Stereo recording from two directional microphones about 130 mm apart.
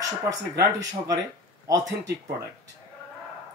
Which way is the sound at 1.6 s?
25° right (ahead or behind).